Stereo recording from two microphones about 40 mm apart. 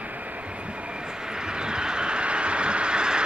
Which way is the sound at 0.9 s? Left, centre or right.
Centre.